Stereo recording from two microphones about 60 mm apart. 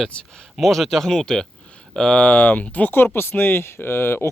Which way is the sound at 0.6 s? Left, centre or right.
Centre.